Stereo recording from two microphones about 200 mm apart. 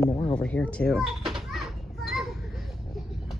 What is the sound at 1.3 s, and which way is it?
Children playing, centre (ahead or behind).